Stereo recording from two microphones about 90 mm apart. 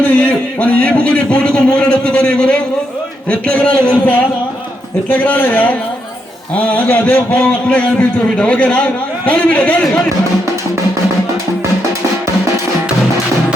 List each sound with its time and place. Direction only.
0.0 s a man's voice: 15° left (ahead or behind)